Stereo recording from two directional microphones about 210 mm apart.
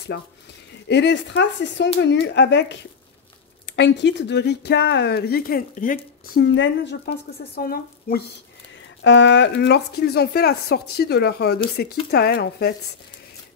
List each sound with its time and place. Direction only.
0.1 s speech: 55° left (ahead or behind)
6.4 s speech: 60° left (ahead or behind)
9.0 s speech: 60° left (ahead or behind)